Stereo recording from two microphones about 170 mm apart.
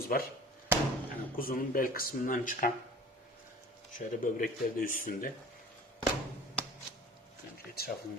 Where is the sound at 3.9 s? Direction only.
50° left (ahead or behind).